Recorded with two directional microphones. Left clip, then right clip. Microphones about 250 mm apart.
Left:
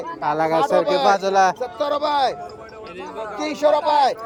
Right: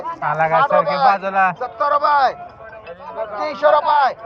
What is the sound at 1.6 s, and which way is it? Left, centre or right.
Speech, left.